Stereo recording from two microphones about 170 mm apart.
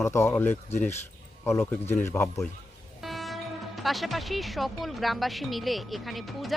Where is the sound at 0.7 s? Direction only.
40° left (ahead or behind).